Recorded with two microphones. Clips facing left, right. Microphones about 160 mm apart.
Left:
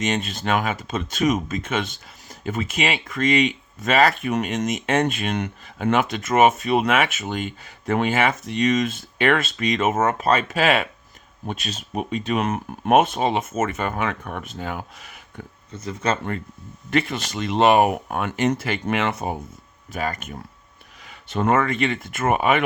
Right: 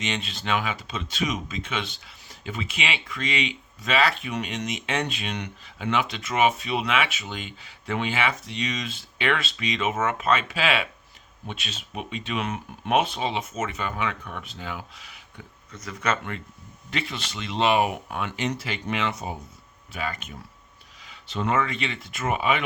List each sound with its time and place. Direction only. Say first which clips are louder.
0.0 s speech: left 7 dB; 45° left (ahead or behind)
15.7 s speech: left 3 dB; 25° left (ahead or behind)
16.9 s speech: left 9 dB; 50° left (ahead or behind)
19.9 s speech: left 5 dB; 45° left (ahead or behind)